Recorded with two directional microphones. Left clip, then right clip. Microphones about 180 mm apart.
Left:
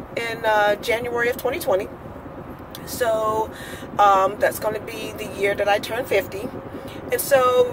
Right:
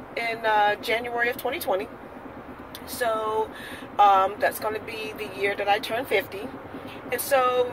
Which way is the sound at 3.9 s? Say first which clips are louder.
Left 2 dB; 10° left (ahead or behind).